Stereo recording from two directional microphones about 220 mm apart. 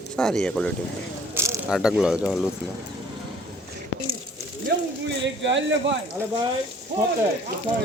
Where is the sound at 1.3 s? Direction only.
10° right (ahead or behind).